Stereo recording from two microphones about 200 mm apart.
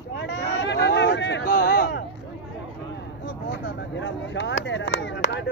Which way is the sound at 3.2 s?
65° left (ahead or behind).